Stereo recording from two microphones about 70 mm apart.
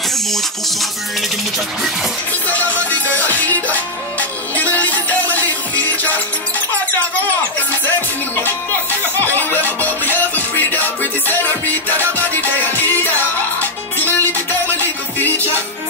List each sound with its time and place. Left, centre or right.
2.4 s music: left
9.4 s music: left